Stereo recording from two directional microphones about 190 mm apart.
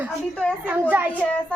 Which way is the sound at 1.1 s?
10° left (ahead or behind).